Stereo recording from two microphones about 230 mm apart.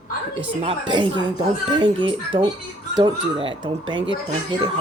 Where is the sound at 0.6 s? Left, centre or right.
Right.